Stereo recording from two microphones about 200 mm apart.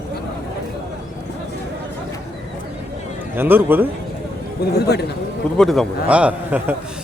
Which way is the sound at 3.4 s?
10° right (ahead or behind).